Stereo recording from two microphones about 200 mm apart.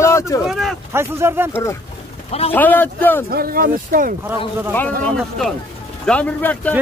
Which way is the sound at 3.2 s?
50° right (ahead or behind).